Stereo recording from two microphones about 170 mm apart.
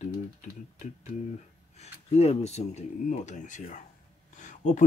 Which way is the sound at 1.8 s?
40° left (ahead or behind).